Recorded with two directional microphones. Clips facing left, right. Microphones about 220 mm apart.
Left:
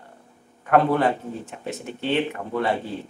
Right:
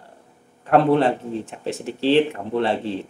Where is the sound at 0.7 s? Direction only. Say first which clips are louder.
Right 3 dB; 25° right (ahead or behind).